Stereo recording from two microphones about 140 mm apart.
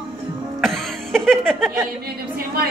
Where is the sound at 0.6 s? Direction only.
Centre (ahead or behind).